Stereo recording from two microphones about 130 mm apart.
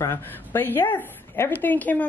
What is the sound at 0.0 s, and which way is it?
Speech, 20° left (ahead or behind).